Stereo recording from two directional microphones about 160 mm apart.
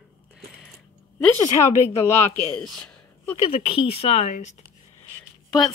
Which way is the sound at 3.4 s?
35° left (ahead or behind).